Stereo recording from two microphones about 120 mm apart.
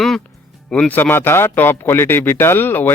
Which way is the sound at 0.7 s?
10° left (ahead or behind).